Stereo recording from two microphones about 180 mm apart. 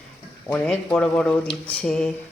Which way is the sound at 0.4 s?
5° left (ahead or behind).